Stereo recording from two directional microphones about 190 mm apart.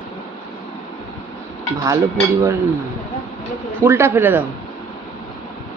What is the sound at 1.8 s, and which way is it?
Speech, 15° right (ahead or behind).